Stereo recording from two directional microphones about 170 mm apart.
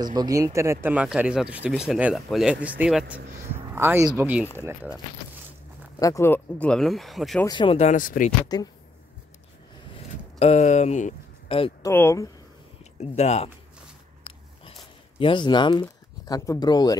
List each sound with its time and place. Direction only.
0.0 s speech: 25° right (ahead or behind)
5.9 s speech: 20° left (ahead or behind); by 7.4 s centre (ahead or behind)
7.4 s speech: 30° left (ahead or behind); by 8.3 s 50° left (ahead or behind)
8.5 s speech: 25° left (ahead or behind)
9.9 s a sound: 40° left (ahead or behind)
11.8 s speech: 15° left (ahead or behind)
13.0 s speech: 40° left (ahead or behind)
14.2 s biting: 30° left (ahead or behind)
15.1 s speech: 30° left (ahead or behind)